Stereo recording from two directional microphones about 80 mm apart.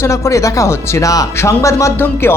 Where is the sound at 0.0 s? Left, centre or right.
Left.